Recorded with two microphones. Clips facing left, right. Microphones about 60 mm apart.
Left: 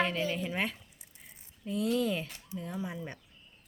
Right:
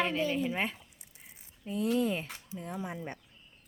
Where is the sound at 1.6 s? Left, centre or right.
Right.